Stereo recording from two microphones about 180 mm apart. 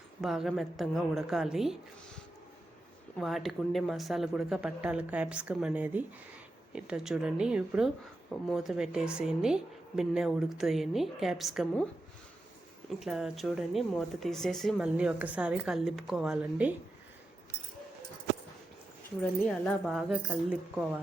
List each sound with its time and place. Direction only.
0.2 s speech: centre (ahead or behind)
12.9 s speech: centre (ahead or behind)
19.2 s speech: 5° left (ahead or behind)